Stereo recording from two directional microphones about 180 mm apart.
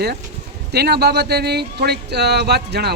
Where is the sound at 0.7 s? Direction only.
65° right (ahead or behind).